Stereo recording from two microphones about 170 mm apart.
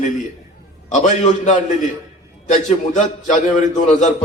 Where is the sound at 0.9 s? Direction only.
45° left (ahead or behind).